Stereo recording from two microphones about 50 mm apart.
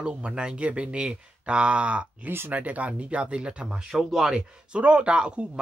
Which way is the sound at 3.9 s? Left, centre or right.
Centre.